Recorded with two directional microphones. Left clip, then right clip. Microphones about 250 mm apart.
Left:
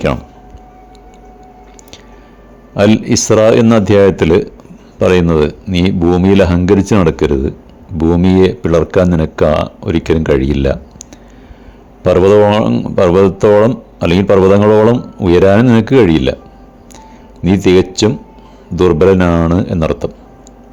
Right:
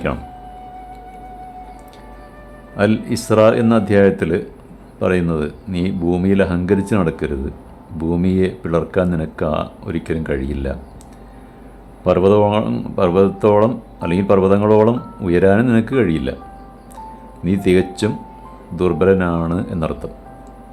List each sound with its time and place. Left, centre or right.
2.7 s speech: left
12.0 s speech: left
17.4 s speech: left